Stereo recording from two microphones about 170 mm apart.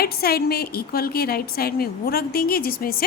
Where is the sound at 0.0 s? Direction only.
65° left (ahead or behind).